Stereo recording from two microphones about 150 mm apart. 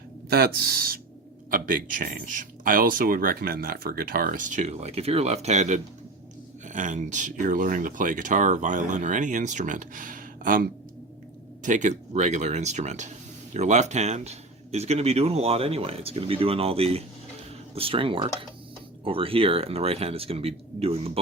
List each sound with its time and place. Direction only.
0.3 s speech: 90° right
1.5 s speech: 65° right (ahead or behind)
11.6 s a man's voice: 55° right (ahead or behind)